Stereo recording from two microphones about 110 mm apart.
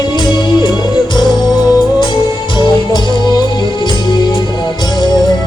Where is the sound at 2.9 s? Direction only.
45° left (ahead or behind).